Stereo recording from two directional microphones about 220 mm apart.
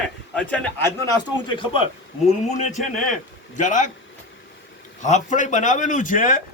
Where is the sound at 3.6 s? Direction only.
35° left (ahead or behind).